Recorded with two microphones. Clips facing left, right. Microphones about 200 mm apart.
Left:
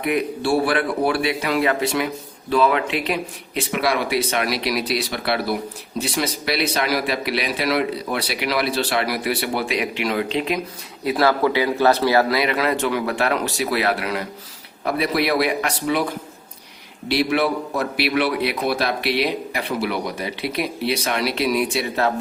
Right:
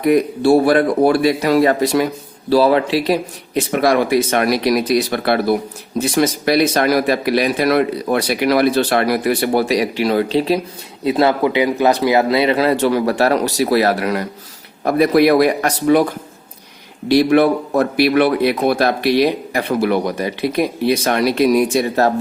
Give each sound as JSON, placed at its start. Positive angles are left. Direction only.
{"t": 0.0, "sound": "a man's voice", "side_deg": -40}
{"t": 11.0, "sound": "a man's voice", "side_deg": -25}
{"t": 17.1, "sound": "a man's voice", "side_deg": -50}